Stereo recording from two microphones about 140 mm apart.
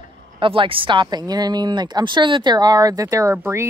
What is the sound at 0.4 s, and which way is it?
Speech, 40° right (ahead or behind).